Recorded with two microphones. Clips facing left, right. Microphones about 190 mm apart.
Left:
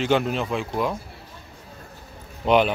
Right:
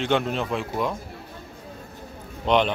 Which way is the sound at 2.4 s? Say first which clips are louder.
Left 2 dB; 5° left (ahead or behind).